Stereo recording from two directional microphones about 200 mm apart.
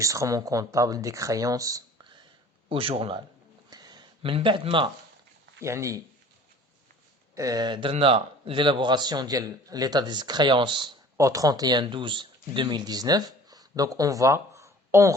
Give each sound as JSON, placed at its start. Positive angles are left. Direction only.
{"t": 0.0, "sound": "speech", "side_deg": -15}
{"t": 2.6, "sound": "a man's voice", "side_deg": -30}
{"t": 3.7, "sound": "a sound", "side_deg": -20}
{"t": 5.6, "sound": "speech", "side_deg": -15}
{"t": 7.3, "sound": "a man's voice", "side_deg": -20}